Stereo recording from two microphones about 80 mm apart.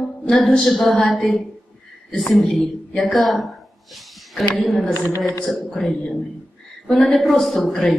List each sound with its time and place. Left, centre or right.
0.3 s a woman's voice: centre
4.9 s speech: left
5.5 s a woman's voice: centre